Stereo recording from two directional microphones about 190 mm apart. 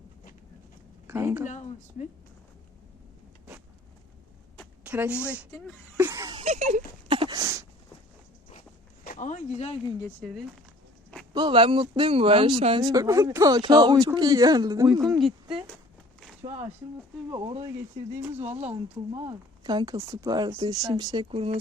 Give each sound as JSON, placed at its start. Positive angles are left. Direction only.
{"t": 1.0, "sound": "a woman's voice", "side_deg": -15}
{"t": 1.5, "sound": "speech", "side_deg": 40}
{"t": 4.8, "sound": "a woman's voice", "side_deg": -5}
{"t": 6.0, "sound": "a sound", "side_deg": -15}
{"t": 6.4, "sound": "speech", "side_deg": -35}
{"t": 7.1, "sound": "a sound", "side_deg": -25}
{"t": 9.0, "sound": "speech", "side_deg": 40}
{"t": 11.3, "sound": "speech", "side_deg": -25}
{"t": 17.3, "sound": "speech", "side_deg": -25}
{"t": 18.1, "sound": "speech", "side_deg": -10}
{"t": 18.3, "sound": "speech", "side_deg": -35}